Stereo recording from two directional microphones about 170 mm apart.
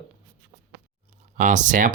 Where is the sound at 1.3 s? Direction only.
45° right (ahead or behind).